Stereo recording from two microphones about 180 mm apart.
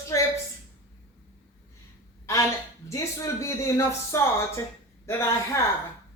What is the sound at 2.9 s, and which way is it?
Speech, 15° left (ahead or behind).